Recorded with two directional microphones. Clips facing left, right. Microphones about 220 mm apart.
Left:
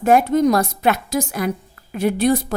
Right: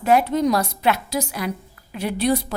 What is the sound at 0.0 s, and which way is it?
A woman's voice, 50° left (ahead or behind).